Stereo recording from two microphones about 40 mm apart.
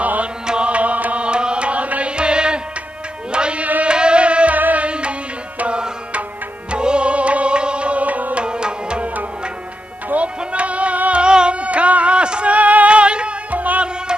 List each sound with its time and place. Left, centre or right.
0.0 s music: right
0.5 s music: right
1.2 s music: right
4.6 s music: right
4.8 s music: right
6.7 s music: right
8.5 s music: right
10.0 s music: right
13.5 s music: right